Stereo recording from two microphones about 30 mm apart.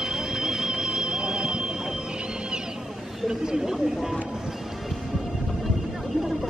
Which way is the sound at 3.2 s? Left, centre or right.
Centre.